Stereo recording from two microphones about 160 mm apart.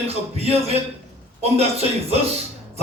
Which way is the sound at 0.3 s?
40° right (ahead or behind).